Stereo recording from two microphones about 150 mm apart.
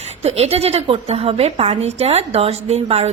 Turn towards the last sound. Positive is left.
turn(degrees=-45)  # may be behind; listen again after turning